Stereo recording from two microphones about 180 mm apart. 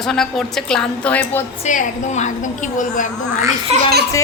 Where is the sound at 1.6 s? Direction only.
45° left (ahead or behind).